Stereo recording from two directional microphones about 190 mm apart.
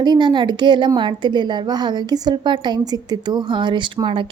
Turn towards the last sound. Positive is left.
turn(degrees=-25)  # may be behind; listen again after turning